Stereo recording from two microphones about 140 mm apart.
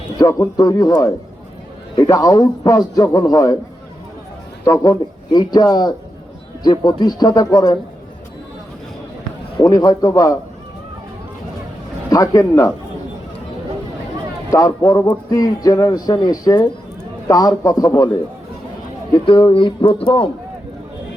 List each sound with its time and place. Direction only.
0.2 s a man's voice: 25° left (ahead or behind)
4.6 s a man's voice: 25° left (ahead or behind)
9.6 s a man's voice: 30° left (ahead or behind)
12.1 s a man's voice: 25° left (ahead or behind)
14.5 s a man's voice: 25° left (ahead or behind)
19.2 s speech: 35° left (ahead or behind)